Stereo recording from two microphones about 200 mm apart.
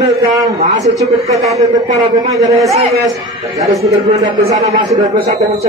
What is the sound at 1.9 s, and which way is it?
Speech, 35° right (ahead or behind).